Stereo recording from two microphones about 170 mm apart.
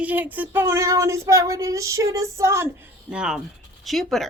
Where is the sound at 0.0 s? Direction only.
10° right (ahead or behind).